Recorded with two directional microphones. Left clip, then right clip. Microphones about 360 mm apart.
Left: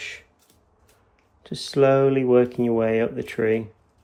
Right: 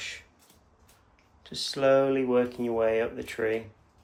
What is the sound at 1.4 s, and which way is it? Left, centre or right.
Speech, centre.